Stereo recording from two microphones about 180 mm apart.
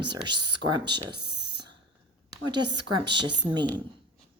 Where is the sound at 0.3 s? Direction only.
25° right (ahead or behind).